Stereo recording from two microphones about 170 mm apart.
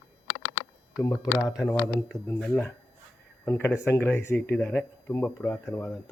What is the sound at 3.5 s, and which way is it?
Speech, 15° left (ahead or behind).